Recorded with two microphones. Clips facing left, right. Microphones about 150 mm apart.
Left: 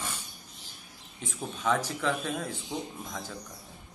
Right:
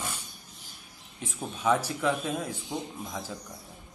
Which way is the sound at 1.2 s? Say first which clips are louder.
Right 3 dB; 10° right (ahead or behind).